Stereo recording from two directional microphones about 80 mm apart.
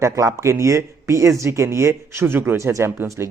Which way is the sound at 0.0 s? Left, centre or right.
Right.